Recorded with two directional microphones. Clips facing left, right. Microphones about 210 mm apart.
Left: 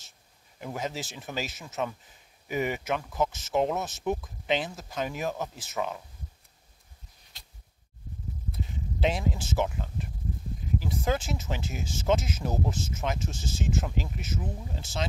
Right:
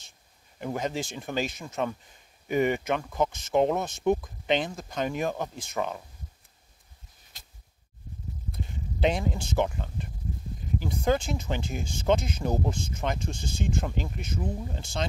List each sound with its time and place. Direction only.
0.7 s speech: 5° left (ahead or behind)
8.5 s speech: centre (ahead or behind)